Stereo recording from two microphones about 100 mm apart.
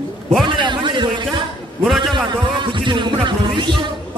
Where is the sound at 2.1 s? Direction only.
55° right (ahead or behind).